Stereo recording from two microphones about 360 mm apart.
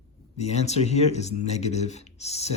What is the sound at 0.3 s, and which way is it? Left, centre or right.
Speech, centre.